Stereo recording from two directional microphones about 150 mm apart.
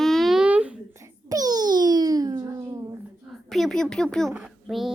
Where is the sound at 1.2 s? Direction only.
25° right (ahead or behind).